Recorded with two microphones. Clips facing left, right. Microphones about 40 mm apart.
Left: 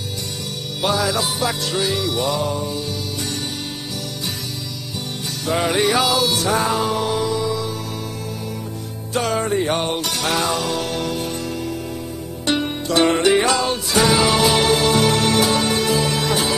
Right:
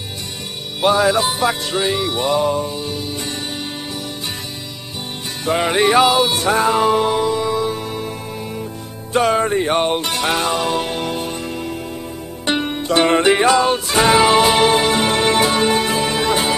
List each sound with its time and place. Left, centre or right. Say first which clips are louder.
0.7 s music: right 6 dB; right
5.7 s music: right 5 dB; right
9.1 s music: right 4 dB; right